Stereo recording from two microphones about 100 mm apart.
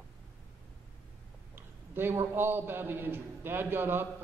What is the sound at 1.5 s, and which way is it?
A man's voice, 20° right (ahead or behind).